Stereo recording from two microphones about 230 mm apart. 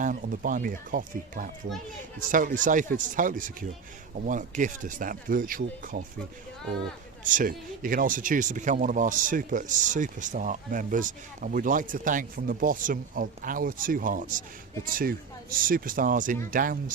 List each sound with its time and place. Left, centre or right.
0.0 s speech: right
7.3 s speech: right
15.5 s speech: right